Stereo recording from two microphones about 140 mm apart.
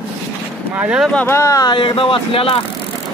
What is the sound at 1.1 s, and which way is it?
Speech, 15° left (ahead or behind).